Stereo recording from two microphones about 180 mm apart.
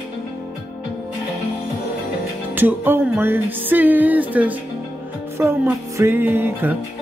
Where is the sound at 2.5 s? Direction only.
10° right (ahead or behind).